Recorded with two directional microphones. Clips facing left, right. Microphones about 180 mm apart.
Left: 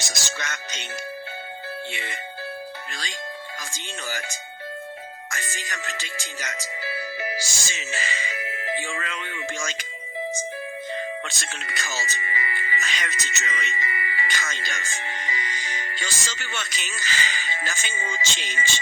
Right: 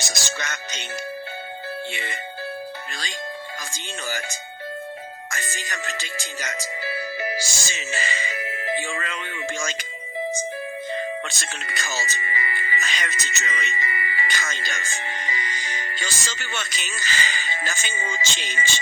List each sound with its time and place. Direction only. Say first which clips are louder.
0.3 s speech: right 2 dB; 35° right (ahead or behind)
1.9 s speech: right 2 dB; 35° right (ahead or behind)
3.7 s speech: right 2 dB; 35° right (ahead or behind)
11.3 s speech: right 1 dB; 35° right (ahead or behind)